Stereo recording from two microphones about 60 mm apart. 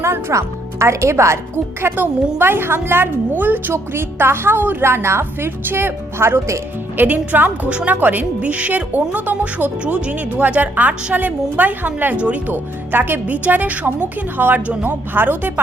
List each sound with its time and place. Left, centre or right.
0.0 s speech: right
1.8 s a woman's voice: right
4.8 s speech: right
12.1 s a woman's voice: right